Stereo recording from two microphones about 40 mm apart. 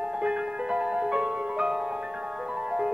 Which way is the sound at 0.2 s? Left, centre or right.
Right.